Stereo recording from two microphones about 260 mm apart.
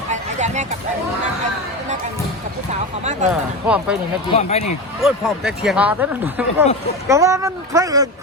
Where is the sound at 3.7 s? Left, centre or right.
Centre.